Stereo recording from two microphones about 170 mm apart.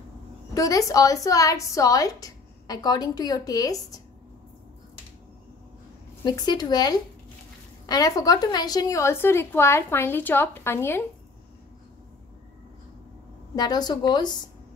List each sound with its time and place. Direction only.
0.6 s a woman's voice: 20° left (ahead or behind)
6.2 s a woman's voice: 25° left (ahead or behind)
13.6 s a woman's voice: 25° left (ahead or behind)